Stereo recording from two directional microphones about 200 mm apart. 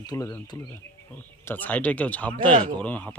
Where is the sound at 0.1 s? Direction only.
15° left (ahead or behind).